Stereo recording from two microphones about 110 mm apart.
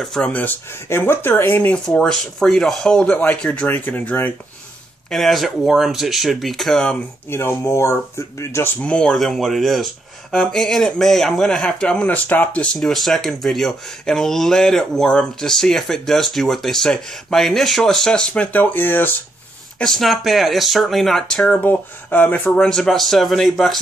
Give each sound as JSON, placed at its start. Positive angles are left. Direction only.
{"t": 0.0, "sound": "speech", "side_deg": 5}
{"t": 5.1, "sound": "speech", "side_deg": 0}
{"t": 7.2, "sound": "speech", "side_deg": 25}
{"t": 8.8, "sound": "speech", "side_deg": 5}
{"t": 19.8, "sound": "speech", "side_deg": 0}
{"t": 22.7, "sound": "speech", "side_deg": 5}